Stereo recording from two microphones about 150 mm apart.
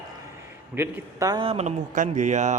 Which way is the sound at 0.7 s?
20° right (ahead or behind).